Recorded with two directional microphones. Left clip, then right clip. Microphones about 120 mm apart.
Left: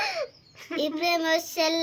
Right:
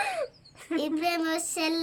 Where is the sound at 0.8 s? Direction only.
35° right (ahead or behind).